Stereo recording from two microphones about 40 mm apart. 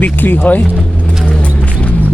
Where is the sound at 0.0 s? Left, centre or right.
Left.